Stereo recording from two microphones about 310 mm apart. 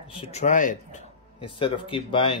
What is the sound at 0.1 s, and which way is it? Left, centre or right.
Speech, centre.